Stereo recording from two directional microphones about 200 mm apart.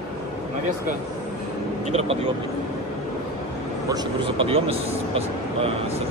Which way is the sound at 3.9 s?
25° right (ahead or behind).